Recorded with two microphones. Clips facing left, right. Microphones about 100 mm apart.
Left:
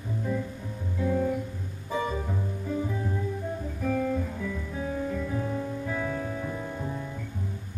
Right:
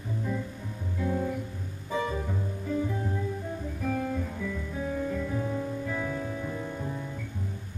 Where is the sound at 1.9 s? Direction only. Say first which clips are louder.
Left 1 dB; 15° left (ahead or behind).